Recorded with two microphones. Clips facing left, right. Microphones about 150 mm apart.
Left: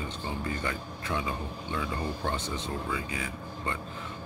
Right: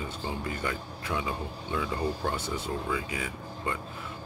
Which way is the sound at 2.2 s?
10° right (ahead or behind).